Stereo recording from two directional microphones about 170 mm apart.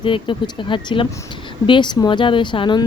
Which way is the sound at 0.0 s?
30° left (ahead or behind).